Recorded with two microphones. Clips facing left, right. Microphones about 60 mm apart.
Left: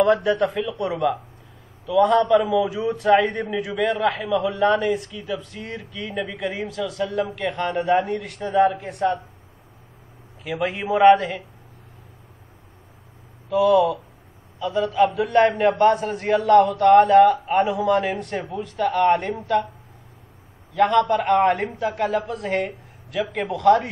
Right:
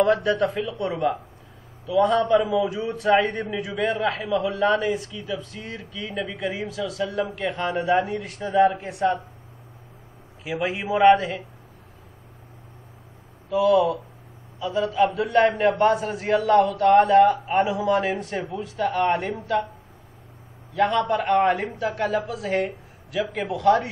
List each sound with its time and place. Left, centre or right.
0.0 s a man's voice: centre
0.6 s a man's voice: left
0.8 s a man's voice: centre
10.4 s a man's voice: centre
13.5 s a man's voice: centre
20.7 s a man's voice: centre